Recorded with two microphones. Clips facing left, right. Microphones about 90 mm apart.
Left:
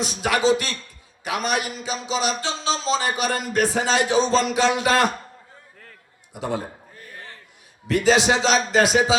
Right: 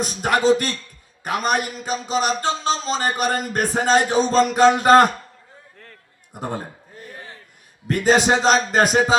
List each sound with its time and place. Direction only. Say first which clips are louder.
0.0 s speech: right 2 dB; 45° right (ahead or behind)
7.9 s speech: right 1 dB; 50° right (ahead or behind)